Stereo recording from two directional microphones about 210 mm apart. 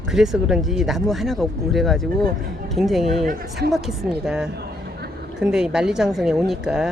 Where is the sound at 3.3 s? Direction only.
50° right (ahead or behind).